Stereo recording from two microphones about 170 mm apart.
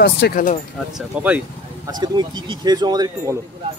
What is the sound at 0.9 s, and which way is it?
Speech, 10° right (ahead or behind).